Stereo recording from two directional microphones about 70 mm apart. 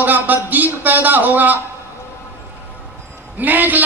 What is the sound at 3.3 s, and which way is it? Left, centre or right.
Speech, right.